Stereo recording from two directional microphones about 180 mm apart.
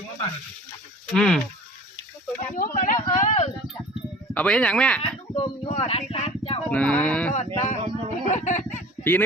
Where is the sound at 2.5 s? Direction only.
45° left (ahead or behind).